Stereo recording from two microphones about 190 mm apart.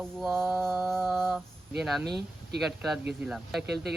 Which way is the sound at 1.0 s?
Centre (ahead or behind).